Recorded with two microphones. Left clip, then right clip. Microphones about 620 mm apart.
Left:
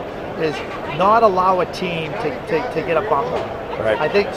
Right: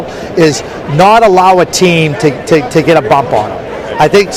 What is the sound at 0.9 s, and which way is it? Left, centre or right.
A man's voice, right.